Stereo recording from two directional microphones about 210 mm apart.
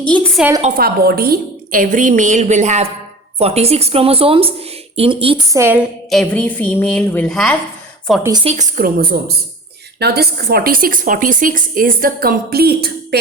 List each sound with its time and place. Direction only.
0.0 s a woman's voice: 5° left (ahead or behind)
0.6 s a woman's voice: 45° right (ahead or behind); by 5.5 s 25° right (ahead or behind)
5.5 s a woman's voice: 10° right (ahead or behind)
6.1 s a woman's voice: 5° left (ahead or behind)
8.4 s a woman's voice: 40° right (ahead or behind)